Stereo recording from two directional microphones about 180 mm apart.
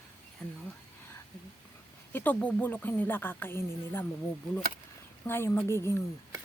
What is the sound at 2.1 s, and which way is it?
Speech, 10° left (ahead or behind).